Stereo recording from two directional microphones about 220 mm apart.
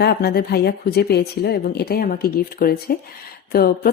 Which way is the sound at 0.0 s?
50° left (ahead or behind).